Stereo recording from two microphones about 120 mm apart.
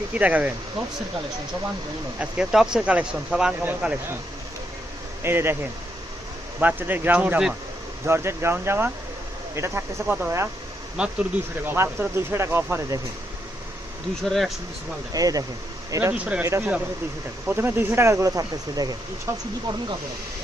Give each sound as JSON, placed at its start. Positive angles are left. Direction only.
{"t": 0.1, "sound": "speech", "side_deg": -10}
{"t": 2.1, "sound": "speech", "side_deg": -5}
{"t": 5.2, "sound": "speech", "side_deg": -20}
{"t": 6.6, "sound": "speech", "side_deg": -15}
{"t": 8.0, "sound": "speech", "side_deg": -20}
{"t": 10.9, "sound": "speech", "side_deg": -10}
{"t": 14.3, "sound": "speech", "side_deg": 0}
{"t": 15.1, "sound": "speech", "side_deg": -30}
{"t": 16.1, "sound": "speech", "side_deg": -10}
{"t": 16.4, "sound": "speech", "side_deg": -20}